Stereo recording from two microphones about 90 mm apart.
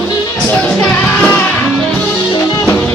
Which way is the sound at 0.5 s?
10° left (ahead or behind).